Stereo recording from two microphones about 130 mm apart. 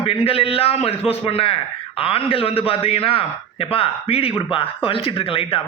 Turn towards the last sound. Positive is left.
turn(degrees=45)  # may be behind; listen again after turning